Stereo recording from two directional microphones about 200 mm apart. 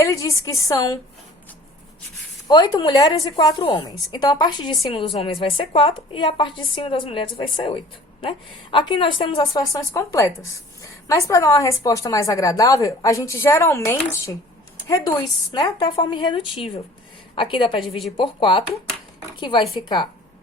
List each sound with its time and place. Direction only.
0.0 s a woman's voice: 15° left (ahead or behind)
2.5 s a woman's voice: 20° left (ahead or behind)